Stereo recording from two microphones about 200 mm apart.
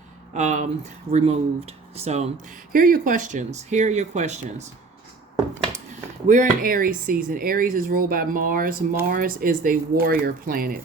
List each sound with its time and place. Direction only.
0.3 s speech: 35° right (ahead or behind)
2.7 s speech: 45° right (ahead or behind)
6.2 s speech: 40° right (ahead or behind)